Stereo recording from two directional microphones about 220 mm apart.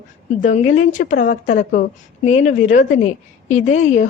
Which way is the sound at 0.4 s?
35° left (ahead or behind).